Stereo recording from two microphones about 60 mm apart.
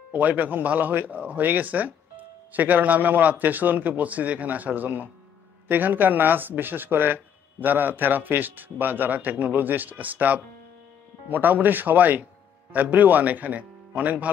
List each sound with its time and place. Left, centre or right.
0.1 s speech: right